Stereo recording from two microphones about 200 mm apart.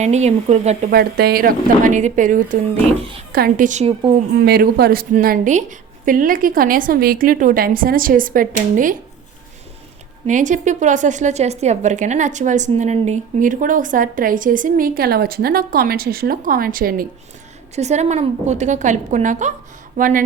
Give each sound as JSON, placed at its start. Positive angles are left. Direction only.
{"t": 0.0, "sound": "a woman's voice", "side_deg": -35}
{"t": 0.9, "sound": "a woman's voice", "side_deg": -50}
{"t": 3.0, "sound": "a woman's voice", "side_deg": -30}
{"t": 3.3, "sound": "a woman's voice", "side_deg": -45}
{"t": 4.4, "sound": "a woman's voice", "side_deg": -50}
{"t": 10.2, "sound": "a woman's voice", "side_deg": -40}
{"t": 17.7, "sound": "a woman's voice", "side_deg": -35}